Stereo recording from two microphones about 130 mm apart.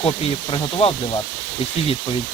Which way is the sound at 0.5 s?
40° left (ahead or behind).